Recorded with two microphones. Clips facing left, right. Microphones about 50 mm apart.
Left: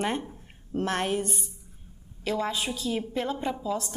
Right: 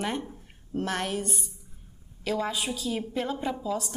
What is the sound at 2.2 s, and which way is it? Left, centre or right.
A woman's voice, centre.